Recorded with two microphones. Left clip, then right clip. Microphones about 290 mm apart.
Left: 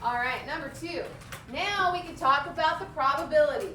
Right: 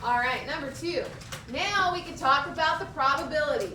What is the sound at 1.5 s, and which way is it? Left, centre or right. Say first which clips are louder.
A woman's voice: right 1 dB; left.